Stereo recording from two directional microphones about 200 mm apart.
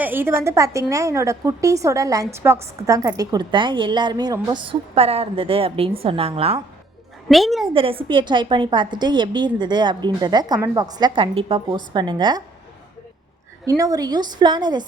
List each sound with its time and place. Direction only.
0.0 s a woman's voice: 10° right (ahead or behind); by 6.6 s 30° right (ahead or behind)
7.3 s a woman's voice: centre (ahead or behind)
7.7 s a woman's voice: 25° right (ahead or behind)
13.7 s a woman's voice: 15° right (ahead or behind)